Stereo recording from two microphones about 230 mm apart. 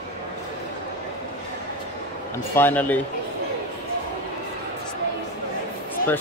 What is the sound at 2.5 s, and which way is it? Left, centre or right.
Speech, centre.